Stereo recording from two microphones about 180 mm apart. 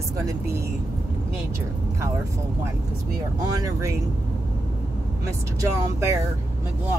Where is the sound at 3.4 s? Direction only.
20° right (ahead or behind).